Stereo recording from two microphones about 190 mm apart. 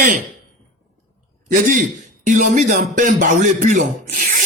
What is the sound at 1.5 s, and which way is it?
A man's voice, 45° right (ahead or behind).